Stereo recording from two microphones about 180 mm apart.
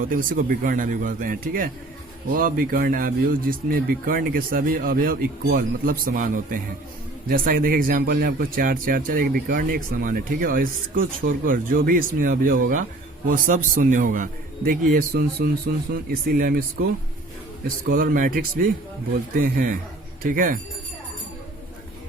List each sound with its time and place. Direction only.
0.0 s speech: 50° right (ahead or behind)